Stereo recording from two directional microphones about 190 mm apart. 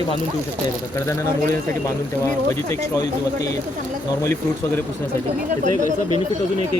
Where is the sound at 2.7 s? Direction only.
15° left (ahead or behind).